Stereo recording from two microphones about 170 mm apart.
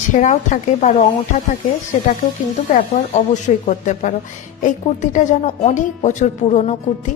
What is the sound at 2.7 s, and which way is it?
A woman's voice, 45° left (ahead or behind).